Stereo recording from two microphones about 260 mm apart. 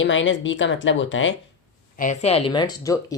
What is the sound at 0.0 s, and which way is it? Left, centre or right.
Speech, left.